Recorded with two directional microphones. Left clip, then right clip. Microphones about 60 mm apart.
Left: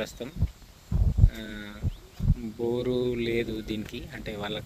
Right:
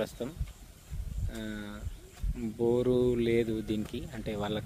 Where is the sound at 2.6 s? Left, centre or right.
Right.